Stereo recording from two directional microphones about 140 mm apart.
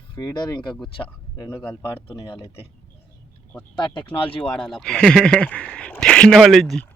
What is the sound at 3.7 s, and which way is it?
Speech, 35° left (ahead or behind).